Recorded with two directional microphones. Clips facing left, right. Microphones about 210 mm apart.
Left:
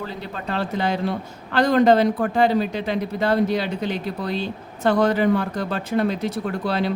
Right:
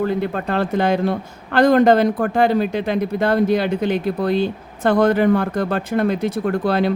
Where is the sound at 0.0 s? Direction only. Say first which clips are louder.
Right 10 dB; 55° right (ahead or behind).